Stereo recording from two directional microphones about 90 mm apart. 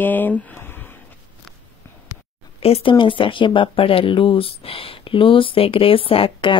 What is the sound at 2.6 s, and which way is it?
Speech, 90° left.